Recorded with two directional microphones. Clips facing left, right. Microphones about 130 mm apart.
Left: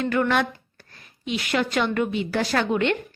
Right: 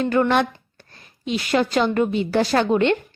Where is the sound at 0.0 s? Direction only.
30° right (ahead or behind).